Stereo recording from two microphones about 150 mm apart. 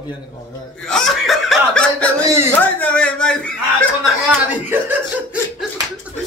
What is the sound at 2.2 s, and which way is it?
Speech, 20° right (ahead or behind).